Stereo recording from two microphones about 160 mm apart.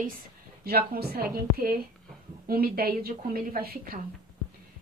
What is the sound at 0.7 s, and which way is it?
A woman's voice, 75° right (ahead or behind).